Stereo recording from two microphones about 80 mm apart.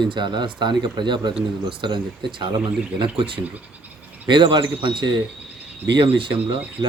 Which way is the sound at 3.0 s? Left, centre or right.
Right.